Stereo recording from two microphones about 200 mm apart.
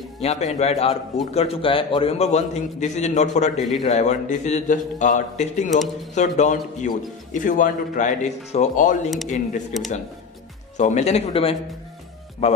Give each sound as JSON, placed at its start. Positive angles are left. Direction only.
{"t": 0.2, "sound": "a man's voice", "side_deg": 35}
{"t": 3.5, "sound": "a man's voice", "side_deg": 0}
{"t": 3.8, "sound": "a man's voice", "side_deg": 35}
{"t": 10.8, "sound": "a man's voice", "side_deg": 35}